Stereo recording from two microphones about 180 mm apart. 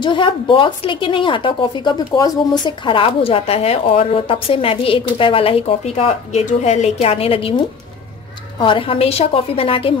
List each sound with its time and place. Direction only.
0.0 s speech: 30° left (ahead or behind)